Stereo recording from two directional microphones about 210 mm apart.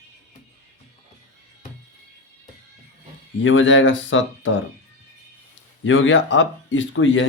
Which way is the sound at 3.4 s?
65° left (ahead or behind).